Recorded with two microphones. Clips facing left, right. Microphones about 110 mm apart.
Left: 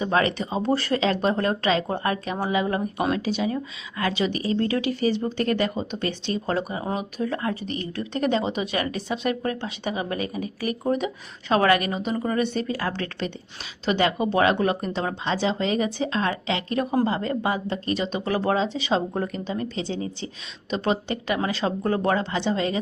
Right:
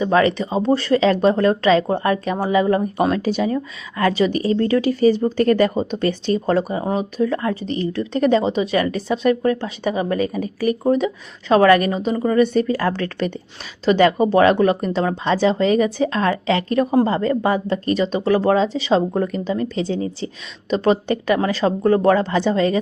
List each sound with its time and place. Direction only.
0.1 s speech: 35° right (ahead or behind)
22.5 s a woman's voice: 20° left (ahead or behind)